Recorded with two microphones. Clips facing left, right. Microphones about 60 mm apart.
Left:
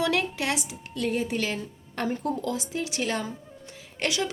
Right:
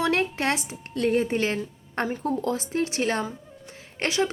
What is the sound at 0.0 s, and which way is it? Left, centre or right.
A woman's voice, right.